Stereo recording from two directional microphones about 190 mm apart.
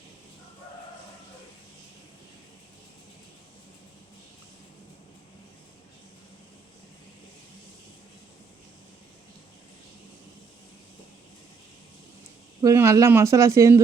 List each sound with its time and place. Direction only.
12.6 s speech: 15° right (ahead or behind)